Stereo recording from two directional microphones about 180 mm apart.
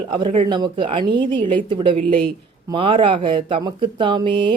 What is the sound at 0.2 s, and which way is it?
A woman's voice, 25° right (ahead or behind).